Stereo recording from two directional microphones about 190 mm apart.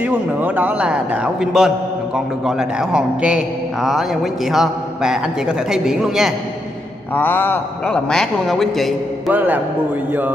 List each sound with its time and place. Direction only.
0.0 s a man's voice: 10° right (ahead or behind)
7.2 s a man's voice: 10° left (ahead or behind)